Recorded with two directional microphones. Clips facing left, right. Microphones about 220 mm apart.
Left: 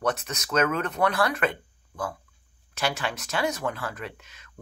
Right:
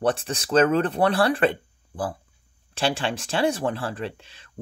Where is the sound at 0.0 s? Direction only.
30° right (ahead or behind).